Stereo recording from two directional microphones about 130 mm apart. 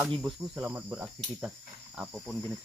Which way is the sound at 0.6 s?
15° right (ahead or behind).